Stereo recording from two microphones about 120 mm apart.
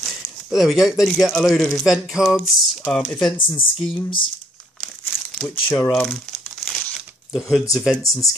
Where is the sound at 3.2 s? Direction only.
40° left (ahead or behind).